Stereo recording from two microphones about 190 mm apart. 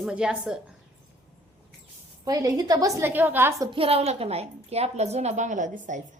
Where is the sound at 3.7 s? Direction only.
30° right (ahead or behind).